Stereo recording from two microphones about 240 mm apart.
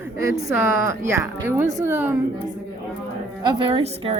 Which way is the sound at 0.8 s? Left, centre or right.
Centre.